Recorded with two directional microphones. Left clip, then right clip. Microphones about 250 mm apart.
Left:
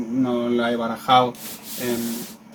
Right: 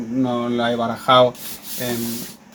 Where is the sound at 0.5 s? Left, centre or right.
Right.